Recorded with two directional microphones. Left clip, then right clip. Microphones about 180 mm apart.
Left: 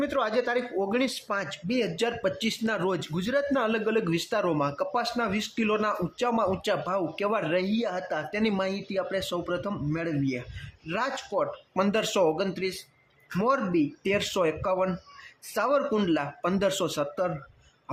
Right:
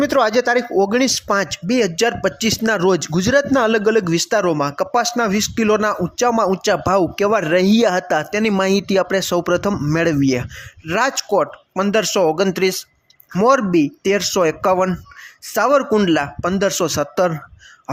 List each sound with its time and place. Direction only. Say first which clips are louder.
0.0 s speech: right 11 dB; 40° right (ahead or behind)
11.7 s speech: right 9 dB; 30° right (ahead or behind)
14.0 s speech: right 10 dB; 30° right (ahead or behind)
14.6 s speech: right 11 dB; 45° right (ahead or behind)
15.5 s speech: right 11 dB; 35° right (ahead or behind)